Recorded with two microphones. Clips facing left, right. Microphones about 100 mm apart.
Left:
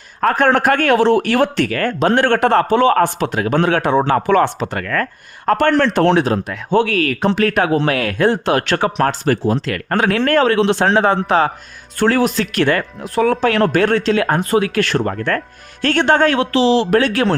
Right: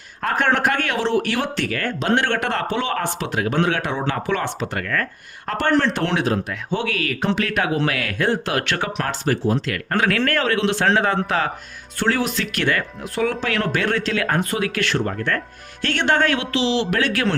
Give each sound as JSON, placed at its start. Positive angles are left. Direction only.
{"t": 0.3, "sound": "a man's voice", "side_deg": 40}
{"t": 6.1, "sound": "a man's voice", "side_deg": 35}
{"t": 9.2, "sound": "speech", "side_deg": 60}
{"t": 9.6, "sound": "speech", "side_deg": 40}
{"t": 10.1, "sound": "a man's voice", "side_deg": 25}
{"t": 11.9, "sound": "speech", "side_deg": 50}
{"t": 14.9, "sound": "a man's voice", "side_deg": 50}
{"t": 15.8, "sound": "speech", "side_deg": 35}